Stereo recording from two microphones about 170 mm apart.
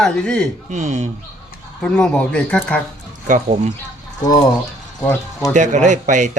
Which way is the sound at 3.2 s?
50° right (ahead or behind).